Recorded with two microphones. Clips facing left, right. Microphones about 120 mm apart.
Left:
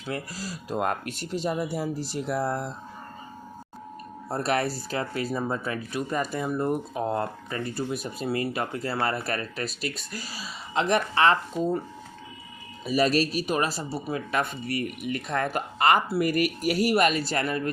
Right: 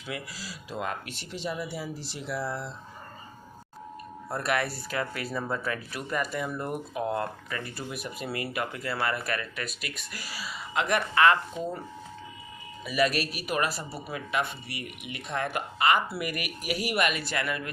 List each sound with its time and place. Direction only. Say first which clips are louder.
0.1 s speech: left 5 dB; 45° left (ahead or behind)
4.3 s speech: left 3 dB; 30° left (ahead or behind)
12.8 s speech: left 4 dB; 35° left (ahead or behind)